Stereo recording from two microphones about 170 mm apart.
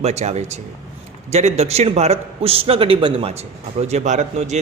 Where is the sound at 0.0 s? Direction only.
40° right (ahead or behind).